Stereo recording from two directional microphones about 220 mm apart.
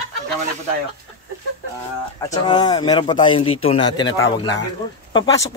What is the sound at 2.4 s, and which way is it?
Speech, 20° left (ahead or behind).